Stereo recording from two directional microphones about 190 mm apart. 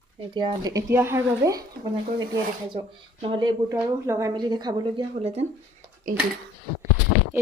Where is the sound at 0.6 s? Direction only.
15° right (ahead or behind); by 5.4 s 35° right (ahead or behind).